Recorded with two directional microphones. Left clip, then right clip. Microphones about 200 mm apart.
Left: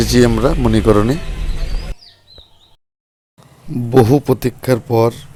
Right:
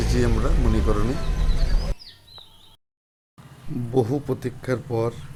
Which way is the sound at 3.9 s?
35° left (ahead or behind).